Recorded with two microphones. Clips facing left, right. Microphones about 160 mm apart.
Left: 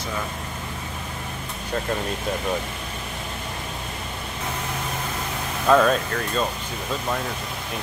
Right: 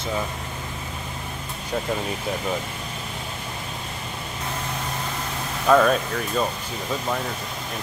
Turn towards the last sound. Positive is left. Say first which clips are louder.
# even
turn(degrees=-5)  # may be behind; listen again after turning